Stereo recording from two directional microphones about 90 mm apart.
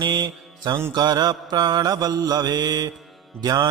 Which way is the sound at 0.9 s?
50° right (ahead or behind).